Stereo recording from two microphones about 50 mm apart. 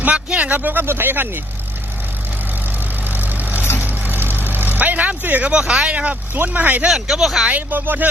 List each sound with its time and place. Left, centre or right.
0.0 s speech: right
3.1 s vehicle: right
3.6 s vehicle: left
3.8 s vehicle: right
5.5 s speech: centre
6.3 s speech: right
6.8 s speech: centre
7.7 s speech: right